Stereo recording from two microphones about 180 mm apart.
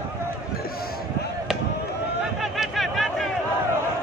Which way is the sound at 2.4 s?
Centre (ahead or behind).